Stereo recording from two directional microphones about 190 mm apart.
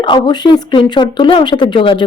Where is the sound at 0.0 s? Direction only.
25° left (ahead or behind).